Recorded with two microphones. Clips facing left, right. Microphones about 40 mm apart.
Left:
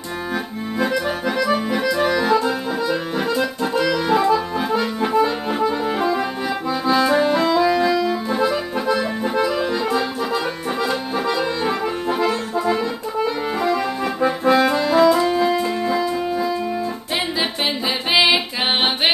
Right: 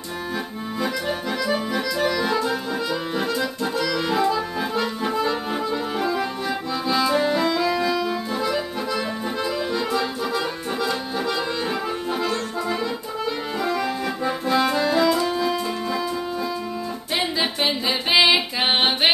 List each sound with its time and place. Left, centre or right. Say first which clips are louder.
1.2 s accordion: left 4 dB; left
2.2 s accordion: left 4 dB; centre
7.1 s music: left 4 dB; left
7.4 s music: left 5 dB; centre
8.3 s accordion: left 4 dB; left
14.8 s music: left 5 dB; centre